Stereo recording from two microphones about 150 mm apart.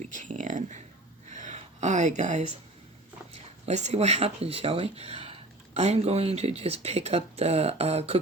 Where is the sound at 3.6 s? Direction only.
50° right (ahead or behind).